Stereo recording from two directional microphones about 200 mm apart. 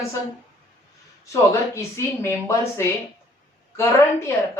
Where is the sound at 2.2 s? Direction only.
15° left (ahead or behind).